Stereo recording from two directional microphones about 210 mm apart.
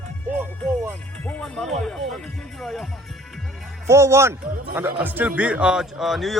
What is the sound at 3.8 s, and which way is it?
Speech, 15° right (ahead or behind).